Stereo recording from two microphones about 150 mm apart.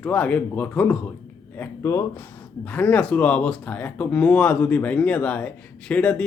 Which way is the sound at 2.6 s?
10° left (ahead or behind).